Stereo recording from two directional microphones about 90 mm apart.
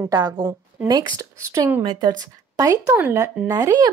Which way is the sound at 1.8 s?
55° right (ahead or behind).